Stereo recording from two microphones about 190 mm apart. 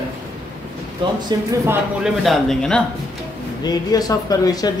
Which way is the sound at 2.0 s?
Centre (ahead or behind).